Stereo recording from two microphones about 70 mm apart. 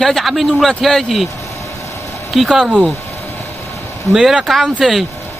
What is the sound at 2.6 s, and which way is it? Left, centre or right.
Speech, centre.